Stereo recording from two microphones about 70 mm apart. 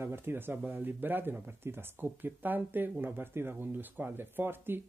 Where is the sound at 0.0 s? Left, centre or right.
Right.